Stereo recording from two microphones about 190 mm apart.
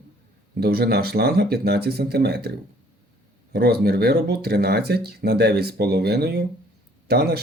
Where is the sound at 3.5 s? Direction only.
55° right (ahead or behind).